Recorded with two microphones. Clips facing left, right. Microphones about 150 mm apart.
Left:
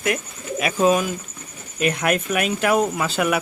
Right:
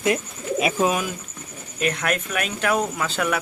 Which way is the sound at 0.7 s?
5° right (ahead or behind).